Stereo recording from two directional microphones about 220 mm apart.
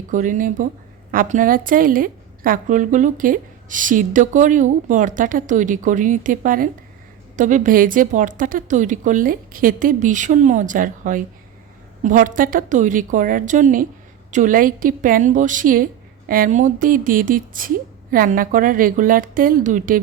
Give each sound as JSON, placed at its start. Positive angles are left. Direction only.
{"t": 0.1, "sound": "a woman's voice", "side_deg": -35}